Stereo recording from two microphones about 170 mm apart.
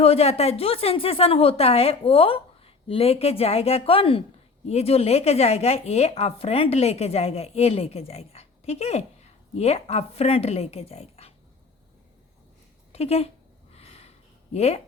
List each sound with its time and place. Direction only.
0.0 s speech: 35° left (ahead or behind)
12.9 s speech: 35° left (ahead or behind)
13.7 s a sound: 40° left (ahead or behind)
14.5 s speech: 40° left (ahead or behind)